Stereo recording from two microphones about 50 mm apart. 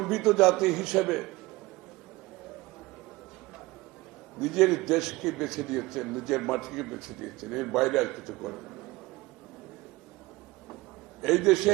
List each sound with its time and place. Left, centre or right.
0.0 s a man's voice: centre
4.4 s a man's voice: centre
11.2 s a man's voice: centre